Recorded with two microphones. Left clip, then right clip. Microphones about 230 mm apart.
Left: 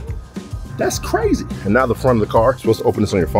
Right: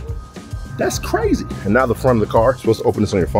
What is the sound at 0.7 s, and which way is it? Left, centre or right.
Speech, centre.